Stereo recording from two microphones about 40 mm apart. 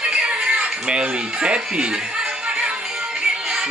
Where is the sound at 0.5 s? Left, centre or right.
Right.